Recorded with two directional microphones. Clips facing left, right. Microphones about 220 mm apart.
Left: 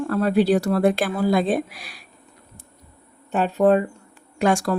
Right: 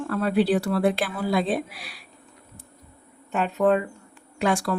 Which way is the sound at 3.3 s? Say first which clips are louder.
Left 4 dB; 35° left (ahead or behind).